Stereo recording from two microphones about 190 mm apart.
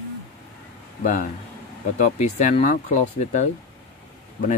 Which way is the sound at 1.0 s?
45° left (ahead or behind).